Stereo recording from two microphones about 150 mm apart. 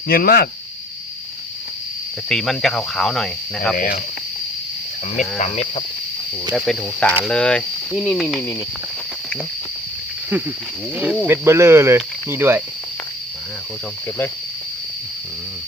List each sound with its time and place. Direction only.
0.1 s speech: 80° left
2.3 s speech: centre (ahead or behind)
3.8 s speech: 65° left (ahead or behind)
5.4 s cricket: 50° left (ahead or behind)
6.5 s speech: centre (ahead or behind)
10.9 s speech: 10° right (ahead or behind)